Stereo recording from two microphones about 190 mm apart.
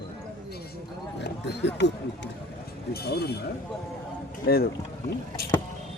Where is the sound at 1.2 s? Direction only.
65° left (ahead or behind).